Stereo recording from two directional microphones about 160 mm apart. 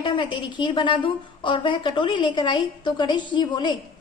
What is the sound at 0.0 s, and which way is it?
A woman's voice, 30° left (ahead or behind).